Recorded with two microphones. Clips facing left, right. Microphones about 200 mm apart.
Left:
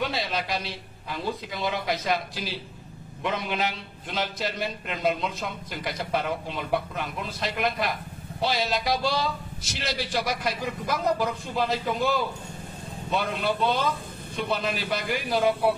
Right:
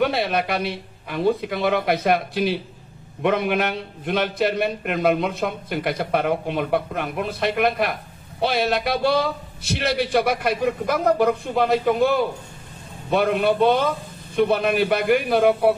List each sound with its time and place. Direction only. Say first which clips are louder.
0.0 s a man's voice: right 8 dB; 60° right (ahead or behind)